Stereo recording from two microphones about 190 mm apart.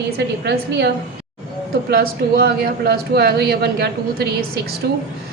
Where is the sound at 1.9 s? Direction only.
55° right (ahead or behind).